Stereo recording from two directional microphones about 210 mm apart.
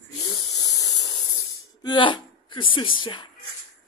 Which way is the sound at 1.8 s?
20° left (ahead or behind).